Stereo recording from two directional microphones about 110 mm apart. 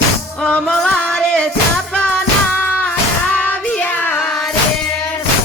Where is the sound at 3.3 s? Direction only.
10° left (ahead or behind).